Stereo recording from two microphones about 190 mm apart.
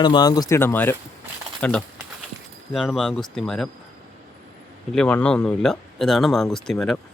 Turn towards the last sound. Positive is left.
turn(degrees=0)  # may be behind; listen again after turning